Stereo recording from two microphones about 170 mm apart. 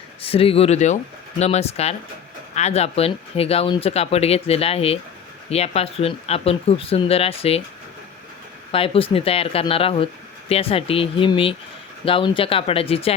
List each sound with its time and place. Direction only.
0.2 s speech: 35° left (ahead or behind)
8.7 s speech: 35° left (ahead or behind)